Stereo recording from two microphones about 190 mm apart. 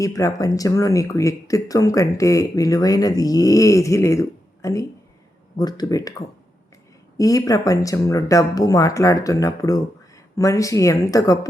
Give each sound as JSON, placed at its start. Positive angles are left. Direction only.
{"t": 0.0, "sound": "speech", "side_deg": 15}